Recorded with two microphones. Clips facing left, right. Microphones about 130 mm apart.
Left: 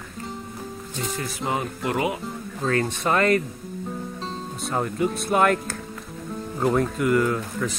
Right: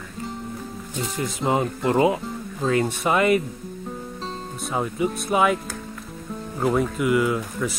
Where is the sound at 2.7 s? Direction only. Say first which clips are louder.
Right 2 dB; 10° right (ahead or behind).